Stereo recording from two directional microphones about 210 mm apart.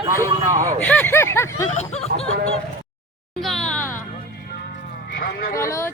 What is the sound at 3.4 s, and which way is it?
Music, centre (ahead or behind).